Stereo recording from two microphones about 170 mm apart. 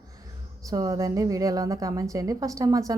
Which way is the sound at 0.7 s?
20° right (ahead or behind).